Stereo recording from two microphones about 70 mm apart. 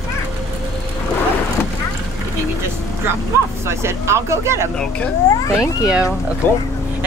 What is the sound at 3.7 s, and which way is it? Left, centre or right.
Speech, right.